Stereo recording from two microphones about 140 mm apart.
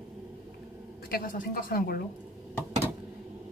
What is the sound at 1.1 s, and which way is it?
Speech, 85° left.